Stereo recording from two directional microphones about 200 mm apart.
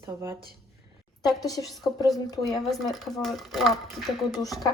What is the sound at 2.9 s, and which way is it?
Speech, centre (ahead or behind).